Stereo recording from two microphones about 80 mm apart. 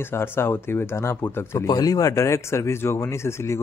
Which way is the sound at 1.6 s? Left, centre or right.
Left.